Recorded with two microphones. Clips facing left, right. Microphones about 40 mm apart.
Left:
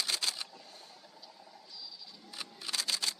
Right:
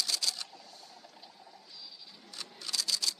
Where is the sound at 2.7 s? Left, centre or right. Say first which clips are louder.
Right 1 dB; left.